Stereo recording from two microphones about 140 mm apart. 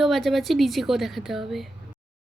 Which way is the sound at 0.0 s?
Centre (ahead or behind).